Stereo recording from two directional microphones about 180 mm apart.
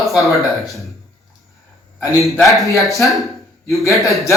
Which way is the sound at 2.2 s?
Centre (ahead or behind).